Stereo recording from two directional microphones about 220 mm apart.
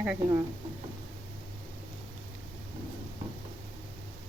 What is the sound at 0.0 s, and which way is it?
Speech, 10° right (ahead or behind).